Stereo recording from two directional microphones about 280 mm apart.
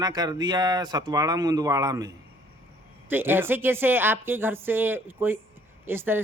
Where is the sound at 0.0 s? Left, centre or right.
Centre.